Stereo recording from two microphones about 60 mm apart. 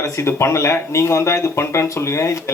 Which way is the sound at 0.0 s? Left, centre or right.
Left.